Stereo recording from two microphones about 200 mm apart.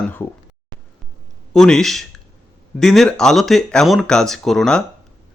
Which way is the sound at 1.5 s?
Centre (ahead or behind).